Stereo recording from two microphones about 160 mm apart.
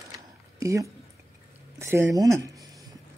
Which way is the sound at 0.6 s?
20° right (ahead or behind).